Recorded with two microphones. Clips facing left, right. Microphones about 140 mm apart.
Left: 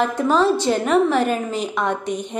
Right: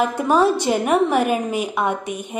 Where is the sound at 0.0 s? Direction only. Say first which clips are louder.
Right 1 dB; 10° right (ahead or behind).